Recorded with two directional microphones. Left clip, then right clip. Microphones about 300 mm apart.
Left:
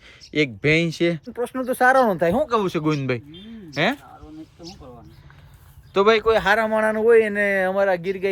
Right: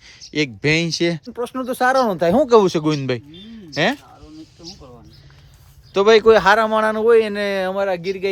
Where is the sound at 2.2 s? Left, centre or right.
Centre.